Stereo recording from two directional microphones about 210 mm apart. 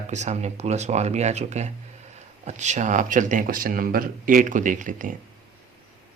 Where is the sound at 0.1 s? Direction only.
35° right (ahead or behind).